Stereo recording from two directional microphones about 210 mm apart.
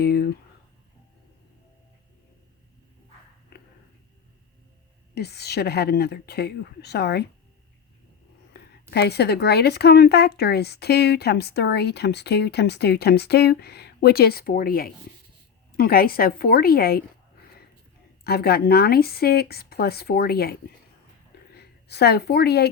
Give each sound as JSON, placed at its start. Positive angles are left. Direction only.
{"t": 5.1, "sound": "speech", "side_deg": 50}
{"t": 8.9, "sound": "speech", "side_deg": 50}
{"t": 18.2, "sound": "a woman's voice", "side_deg": 50}